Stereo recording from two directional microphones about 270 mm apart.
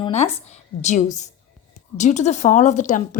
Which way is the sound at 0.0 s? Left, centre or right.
Left.